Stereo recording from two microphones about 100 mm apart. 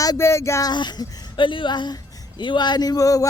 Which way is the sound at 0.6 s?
45° left (ahead or behind).